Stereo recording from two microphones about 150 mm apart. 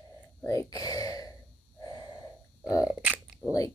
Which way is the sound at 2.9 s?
10° right (ahead or behind).